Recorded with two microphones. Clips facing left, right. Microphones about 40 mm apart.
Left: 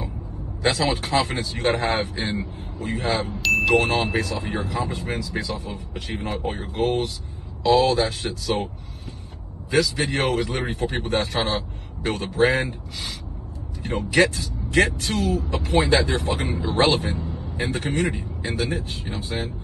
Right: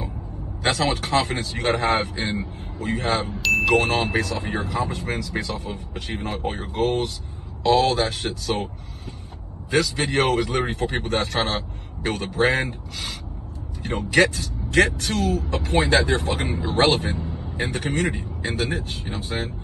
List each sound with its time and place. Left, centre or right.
0.6 s a man's voice: right
5.3 s a man's voice: right
9.7 s a man's voice: right
18.4 s a man's voice: right